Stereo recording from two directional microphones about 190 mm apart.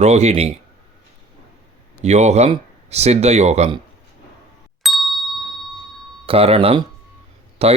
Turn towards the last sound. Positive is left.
turn(degrees=-35)  # may be behind; listen again after turning